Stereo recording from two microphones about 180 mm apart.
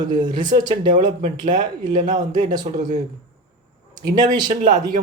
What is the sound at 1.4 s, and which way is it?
Speech, 45° right (ahead or behind).